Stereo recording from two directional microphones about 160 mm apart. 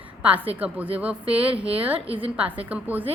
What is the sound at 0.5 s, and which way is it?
Speech, 10° right (ahead or behind).